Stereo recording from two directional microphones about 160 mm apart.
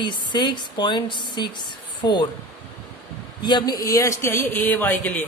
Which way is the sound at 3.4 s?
25° left (ahead or behind).